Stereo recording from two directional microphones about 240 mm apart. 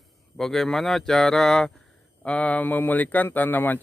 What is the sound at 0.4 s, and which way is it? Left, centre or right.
Speech, centre.